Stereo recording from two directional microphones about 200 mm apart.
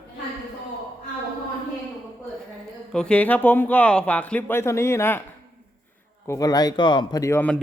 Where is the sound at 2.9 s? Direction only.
5° left (ahead or behind).